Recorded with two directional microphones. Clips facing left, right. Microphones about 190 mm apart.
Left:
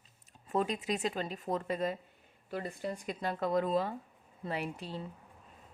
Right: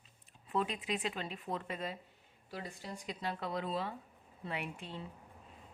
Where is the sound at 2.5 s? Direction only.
55° left (ahead or behind); by 5.0 s 40° left (ahead or behind).